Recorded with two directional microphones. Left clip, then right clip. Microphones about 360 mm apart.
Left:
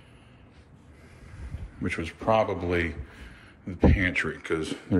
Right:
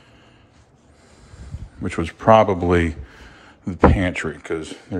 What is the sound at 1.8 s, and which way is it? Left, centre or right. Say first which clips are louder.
Speech: right 6 dB; centre.